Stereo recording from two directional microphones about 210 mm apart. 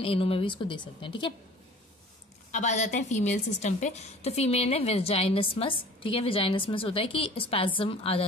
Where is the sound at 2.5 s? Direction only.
35° left (ahead or behind).